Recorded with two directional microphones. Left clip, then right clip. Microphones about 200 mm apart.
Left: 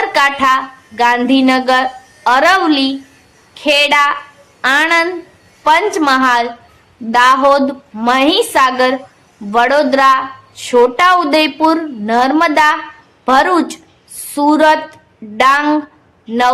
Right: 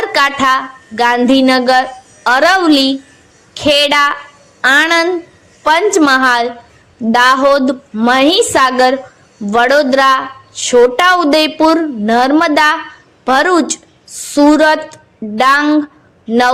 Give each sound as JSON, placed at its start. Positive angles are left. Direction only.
{"t": 0.0, "sound": "a woman's voice", "side_deg": -25}